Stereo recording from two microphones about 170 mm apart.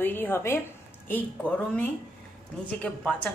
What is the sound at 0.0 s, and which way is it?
A woman's voice, 10° left (ahead or behind).